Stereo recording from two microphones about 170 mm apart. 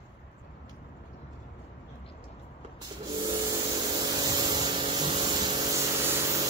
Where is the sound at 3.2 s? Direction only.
25° right (ahead or behind).